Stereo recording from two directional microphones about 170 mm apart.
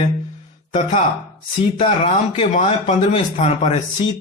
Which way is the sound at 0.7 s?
40° left (ahead or behind).